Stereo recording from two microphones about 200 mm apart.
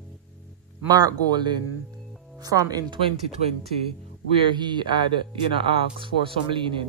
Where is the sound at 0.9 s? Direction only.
20° right (ahead or behind).